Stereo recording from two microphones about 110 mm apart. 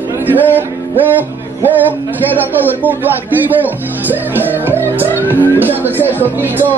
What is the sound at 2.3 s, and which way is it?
Speech, 15° right (ahead or behind).